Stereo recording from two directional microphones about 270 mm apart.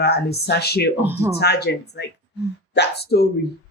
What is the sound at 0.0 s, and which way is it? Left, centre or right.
Speech, left.